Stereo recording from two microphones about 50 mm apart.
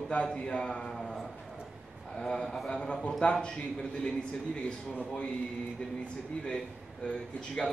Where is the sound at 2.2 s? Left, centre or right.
Centre.